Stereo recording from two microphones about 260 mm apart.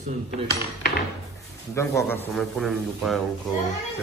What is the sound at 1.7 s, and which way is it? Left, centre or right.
A man's voice, centre.